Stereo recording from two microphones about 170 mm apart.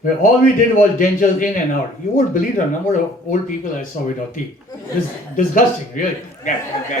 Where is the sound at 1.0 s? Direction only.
50° left (ahead or behind).